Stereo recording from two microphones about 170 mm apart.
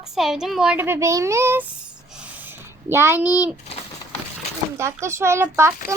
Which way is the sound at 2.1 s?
10° right (ahead or behind).